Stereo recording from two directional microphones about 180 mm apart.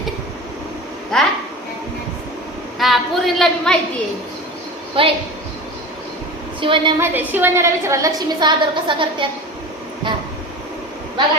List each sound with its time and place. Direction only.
1.1 s a woman's voice: 5° left (ahead or behind)
2.7 s a woman's voice: centre (ahead or behind)
5.0 s a woman's voice: 30° right (ahead or behind)
6.6 s a woman's voice: 30° right (ahead or behind)
7.0 s a woman's voice: 10° right (ahead or behind); by 9.2 s 25° right (ahead or behind)